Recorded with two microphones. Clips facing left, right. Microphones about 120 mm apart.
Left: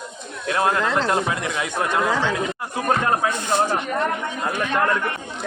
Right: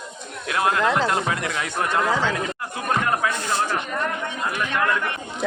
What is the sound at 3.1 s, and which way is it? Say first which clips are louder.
Speech: left 2 dB; 20° left (ahead or behind).